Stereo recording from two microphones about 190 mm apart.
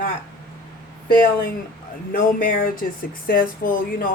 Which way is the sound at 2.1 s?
45° left (ahead or behind).